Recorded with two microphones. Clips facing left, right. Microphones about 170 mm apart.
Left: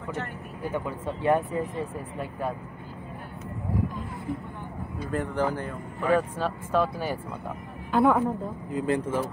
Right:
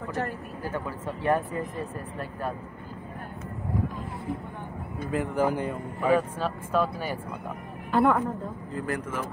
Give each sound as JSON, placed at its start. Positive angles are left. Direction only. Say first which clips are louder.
{"t": 0.7, "sound": "speech", "louder": "left 2 dB", "side_deg": 20}
{"t": 5.1, "sound": "speech", "louder": "right 2 dB", "side_deg": -5}
{"t": 7.9, "sound": "speech", "louder": "left 1 dB", "side_deg": 5}
{"t": 8.7, "sound": "speech", "louder": "left 6 dB", "side_deg": 25}